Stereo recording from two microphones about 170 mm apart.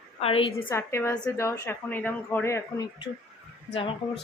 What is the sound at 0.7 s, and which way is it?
Speech, 15° left (ahead or behind).